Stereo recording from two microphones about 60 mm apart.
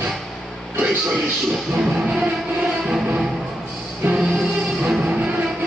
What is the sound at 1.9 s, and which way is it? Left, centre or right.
Music, centre.